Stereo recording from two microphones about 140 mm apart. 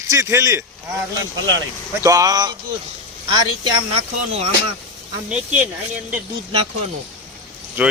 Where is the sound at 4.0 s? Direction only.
50° right (ahead or behind).